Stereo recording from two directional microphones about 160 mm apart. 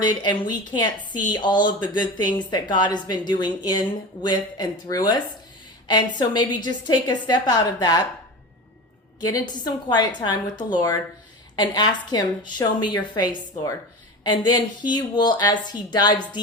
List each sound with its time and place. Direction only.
0.0 s a woman's voice: 25° left (ahead or behind)
9.2 s a woman's voice: 25° left (ahead or behind)